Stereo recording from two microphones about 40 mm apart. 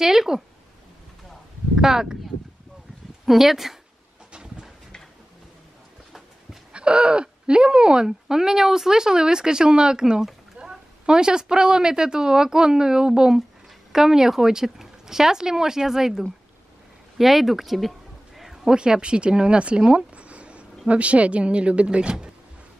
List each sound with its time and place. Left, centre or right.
0.0 s speech: centre
1.8 s speech: centre
3.3 s speech: centre
4.3 s a sound: centre
6.7 s speech: right; by 16.3 s centre
17.2 s a sound: centre
18.8 s speech: right